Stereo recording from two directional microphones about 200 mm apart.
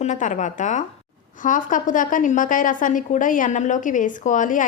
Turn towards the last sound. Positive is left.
turn(degrees=40)  # may be behind; listen again after turning